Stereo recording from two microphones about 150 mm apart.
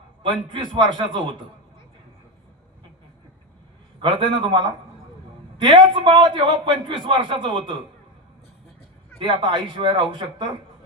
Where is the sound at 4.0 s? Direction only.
30° right (ahead or behind).